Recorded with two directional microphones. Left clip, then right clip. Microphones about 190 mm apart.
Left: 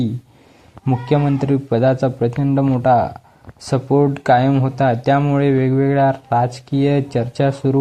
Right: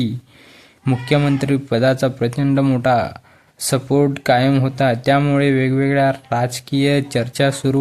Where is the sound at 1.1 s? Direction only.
15° right (ahead or behind).